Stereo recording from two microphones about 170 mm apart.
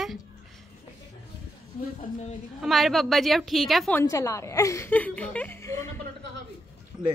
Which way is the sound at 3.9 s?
20° left (ahead or behind).